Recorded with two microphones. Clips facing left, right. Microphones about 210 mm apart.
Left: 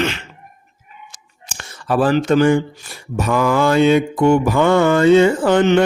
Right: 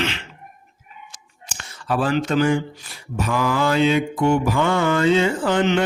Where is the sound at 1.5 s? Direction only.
45° left (ahead or behind).